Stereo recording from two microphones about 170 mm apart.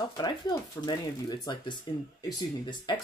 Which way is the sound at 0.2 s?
25° left (ahead or behind).